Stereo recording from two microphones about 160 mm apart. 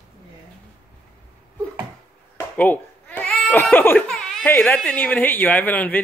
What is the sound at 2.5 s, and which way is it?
Speech, 10° left (ahead or behind).